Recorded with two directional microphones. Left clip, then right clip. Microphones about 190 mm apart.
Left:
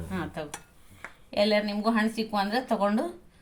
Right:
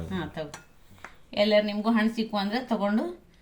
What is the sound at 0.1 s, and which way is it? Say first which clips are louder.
Speech: left 1 dB; 35° left (ahead or behind).